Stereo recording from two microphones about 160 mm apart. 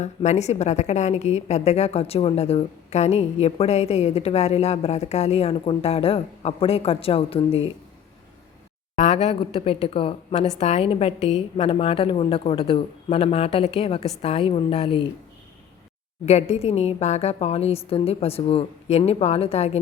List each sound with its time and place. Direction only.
0.0 s a woman's voice: 45° left (ahead or behind)
9.0 s a woman's voice: 40° left (ahead or behind)
16.2 s a woman's voice: 40° left (ahead or behind)